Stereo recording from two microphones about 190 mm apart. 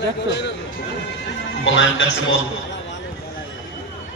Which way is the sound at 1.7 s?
75° left (ahead or behind).